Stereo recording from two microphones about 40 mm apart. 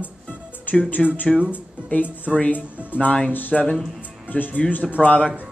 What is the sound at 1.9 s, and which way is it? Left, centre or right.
Speech, left.